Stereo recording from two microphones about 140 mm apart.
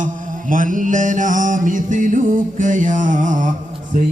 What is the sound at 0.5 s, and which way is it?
Mantra, 70° right (ahead or behind).